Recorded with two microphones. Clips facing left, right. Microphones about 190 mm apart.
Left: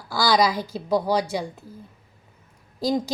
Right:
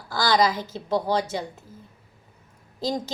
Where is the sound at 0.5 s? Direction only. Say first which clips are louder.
Left 3 dB; 20° right (ahead or behind).